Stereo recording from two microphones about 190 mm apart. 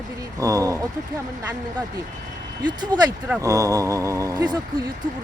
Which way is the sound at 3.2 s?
10° right (ahead or behind).